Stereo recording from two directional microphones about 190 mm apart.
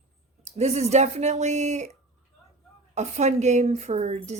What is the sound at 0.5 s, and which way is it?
A woman's voice, 35° right (ahead or behind).